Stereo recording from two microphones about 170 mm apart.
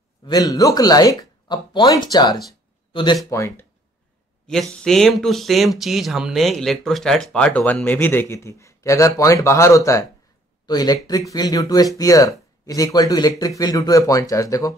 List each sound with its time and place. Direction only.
0.2 s speech: 20° left (ahead or behind)
3.3 s speech: 15° left (ahead or behind)
4.5 s speech: 5° left (ahead or behind); by 14.8 s 20° left (ahead or behind)